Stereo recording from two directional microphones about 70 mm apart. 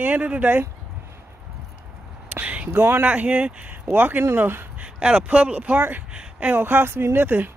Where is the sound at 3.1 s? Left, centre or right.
Centre.